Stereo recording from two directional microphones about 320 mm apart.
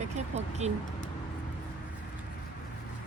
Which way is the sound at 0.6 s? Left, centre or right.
Right.